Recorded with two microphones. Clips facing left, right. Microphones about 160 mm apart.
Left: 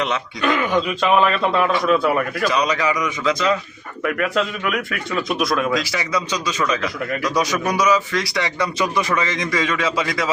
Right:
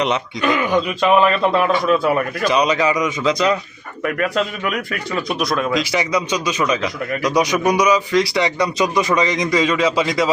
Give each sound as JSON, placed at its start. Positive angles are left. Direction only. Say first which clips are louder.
{"t": 0.4, "sound": "speech", "louder": "right 1 dB", "side_deg": 0}
{"t": 2.5, "sound": "a man's voice", "louder": "right 5 dB", "side_deg": -20}
{"t": 4.0, "sound": "speech", "louder": "right 1 dB", "side_deg": 0}
{"t": 5.7, "sound": "a man's voice", "louder": "right 3 dB", "side_deg": -20}